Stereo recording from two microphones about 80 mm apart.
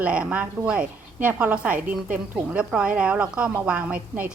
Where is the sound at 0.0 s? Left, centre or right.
Centre.